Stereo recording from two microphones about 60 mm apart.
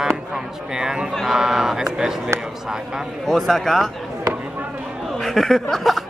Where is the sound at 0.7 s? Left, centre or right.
Centre.